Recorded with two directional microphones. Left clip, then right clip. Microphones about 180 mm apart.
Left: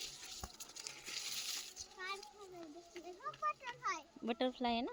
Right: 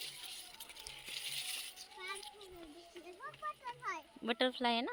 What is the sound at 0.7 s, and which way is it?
Coin, 70° left (ahead or behind).